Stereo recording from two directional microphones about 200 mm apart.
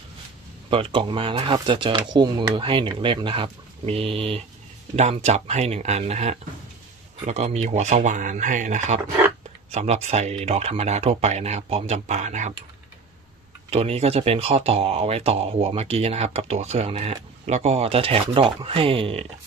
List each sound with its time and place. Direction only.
0.7 s speech: 25° right (ahead or behind)
13.7 s speech: 30° right (ahead or behind)